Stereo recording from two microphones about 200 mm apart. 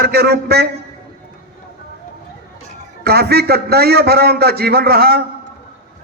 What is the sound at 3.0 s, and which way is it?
A man's voice, 55° right (ahead or behind).